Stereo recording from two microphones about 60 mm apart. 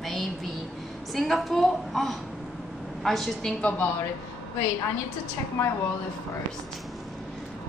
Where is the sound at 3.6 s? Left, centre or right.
Left.